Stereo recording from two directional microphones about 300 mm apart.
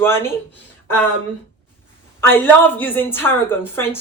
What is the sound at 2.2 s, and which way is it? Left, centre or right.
A woman's voice, centre.